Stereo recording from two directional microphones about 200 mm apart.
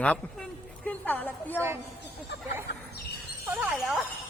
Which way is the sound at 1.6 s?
10° right (ahead or behind).